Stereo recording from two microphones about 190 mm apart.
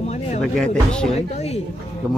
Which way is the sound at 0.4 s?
5° left (ahead or behind).